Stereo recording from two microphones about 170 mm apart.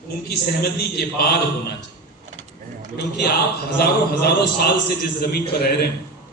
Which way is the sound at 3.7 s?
70° left (ahead or behind).